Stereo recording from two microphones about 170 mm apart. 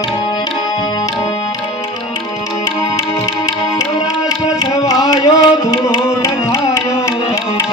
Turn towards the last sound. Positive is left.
turn(degrees=20)  # may be behind; listen again after turning